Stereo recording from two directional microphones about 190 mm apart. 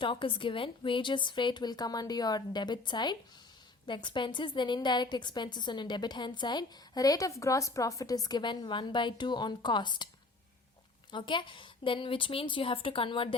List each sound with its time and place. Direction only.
0.0 s a woman's voice: 25° left (ahead or behind)
11.1 s a woman's voice: 25° left (ahead or behind)